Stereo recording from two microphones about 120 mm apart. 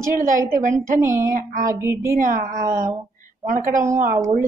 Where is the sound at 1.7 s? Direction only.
20° right (ahead or behind).